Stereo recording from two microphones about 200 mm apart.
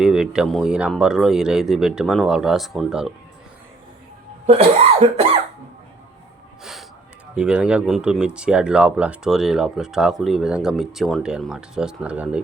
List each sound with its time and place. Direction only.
0.0 s speech: 5° right (ahead or behind)
4.4 s cough: 30° right (ahead or behind)
6.6 s gasp: centre (ahead or behind)
7.3 s speech: 5° right (ahead or behind)